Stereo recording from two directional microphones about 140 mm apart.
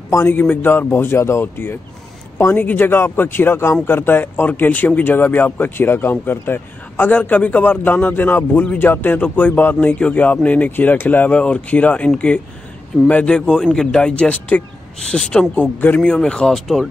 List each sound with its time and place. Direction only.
0.1 s speech: 15° left (ahead or behind)